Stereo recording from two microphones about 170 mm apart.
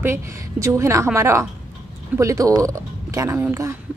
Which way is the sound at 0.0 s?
15° right (ahead or behind).